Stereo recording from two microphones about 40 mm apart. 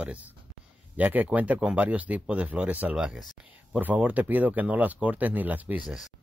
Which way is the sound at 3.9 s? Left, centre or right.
Right.